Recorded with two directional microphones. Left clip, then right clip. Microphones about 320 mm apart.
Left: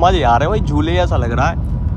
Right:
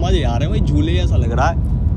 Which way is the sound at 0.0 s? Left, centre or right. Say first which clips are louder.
Left 9 dB; centre.